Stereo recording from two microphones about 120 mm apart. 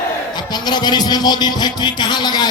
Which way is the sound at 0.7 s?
35° left (ahead or behind).